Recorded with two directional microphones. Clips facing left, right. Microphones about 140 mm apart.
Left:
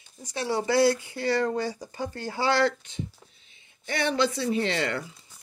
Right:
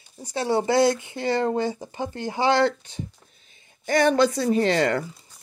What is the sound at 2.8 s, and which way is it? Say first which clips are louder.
Speech: even; 40° right (ahead or behind).